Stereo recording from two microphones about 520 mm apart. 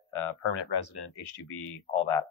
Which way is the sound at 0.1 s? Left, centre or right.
Left.